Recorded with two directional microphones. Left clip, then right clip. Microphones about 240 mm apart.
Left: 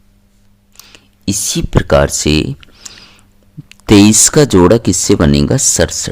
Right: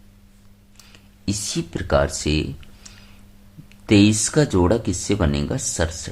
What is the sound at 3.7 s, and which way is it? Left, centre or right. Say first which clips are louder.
Speech: left 9 dB; left.